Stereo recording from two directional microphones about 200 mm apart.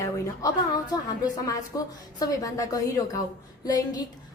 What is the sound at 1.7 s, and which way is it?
A woman's voice, 15° left (ahead or behind).